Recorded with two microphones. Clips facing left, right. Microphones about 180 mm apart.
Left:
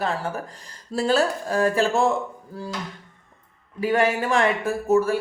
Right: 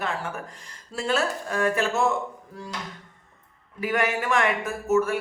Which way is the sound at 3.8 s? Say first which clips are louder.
Left 4 dB; 30° left (ahead or behind).